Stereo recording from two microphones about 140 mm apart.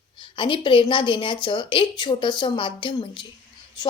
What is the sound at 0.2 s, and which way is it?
A woman's voice, 35° left (ahead or behind).